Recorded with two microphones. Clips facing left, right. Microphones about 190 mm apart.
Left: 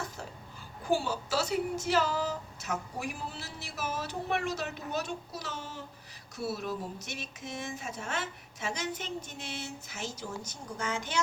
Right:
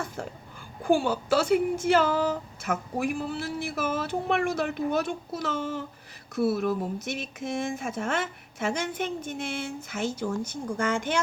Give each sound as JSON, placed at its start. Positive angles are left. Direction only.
{"t": 0.2, "sound": "a child's voice", "side_deg": -50}